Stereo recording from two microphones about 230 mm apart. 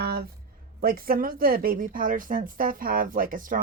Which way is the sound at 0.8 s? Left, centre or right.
Right.